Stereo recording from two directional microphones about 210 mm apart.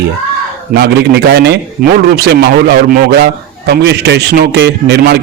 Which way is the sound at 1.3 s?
50° right (ahead or behind).